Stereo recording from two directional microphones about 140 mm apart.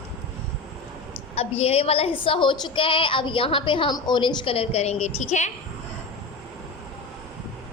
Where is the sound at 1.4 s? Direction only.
45° left (ahead or behind).